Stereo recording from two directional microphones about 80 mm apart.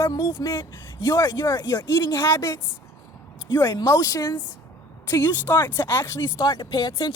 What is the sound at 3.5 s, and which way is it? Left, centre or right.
Speech, left.